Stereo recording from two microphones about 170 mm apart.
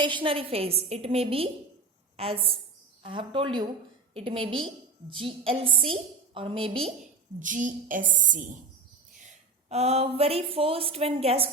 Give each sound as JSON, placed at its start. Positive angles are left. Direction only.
{"t": 0.0, "sound": "a woman's voice", "side_deg": -30}
{"t": 7.3, "sound": "a woman's voice", "side_deg": -50}